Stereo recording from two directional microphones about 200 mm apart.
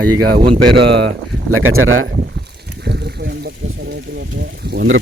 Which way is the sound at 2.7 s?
55° right (ahead or behind).